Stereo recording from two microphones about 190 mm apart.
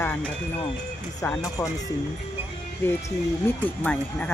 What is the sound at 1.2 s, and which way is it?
Speech, 15° left (ahead or behind).